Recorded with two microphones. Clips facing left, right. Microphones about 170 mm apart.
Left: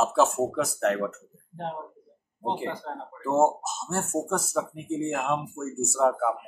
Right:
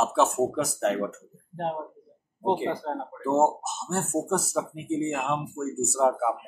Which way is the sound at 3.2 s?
Centre (ahead or behind).